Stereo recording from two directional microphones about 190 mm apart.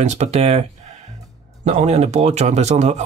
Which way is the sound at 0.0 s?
35° right (ahead or behind).